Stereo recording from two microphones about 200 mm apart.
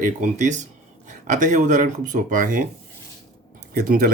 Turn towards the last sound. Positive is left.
turn(degrees=-45)  # may be behind; listen again after turning